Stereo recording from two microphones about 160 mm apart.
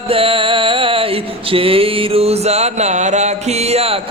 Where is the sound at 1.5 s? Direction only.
35° right (ahead or behind).